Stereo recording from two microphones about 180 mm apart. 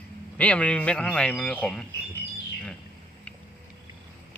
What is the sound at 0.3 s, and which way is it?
A man's voice, 5° left (ahead or behind).